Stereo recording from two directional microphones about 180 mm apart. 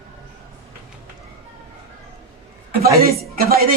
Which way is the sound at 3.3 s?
55° right (ahead or behind).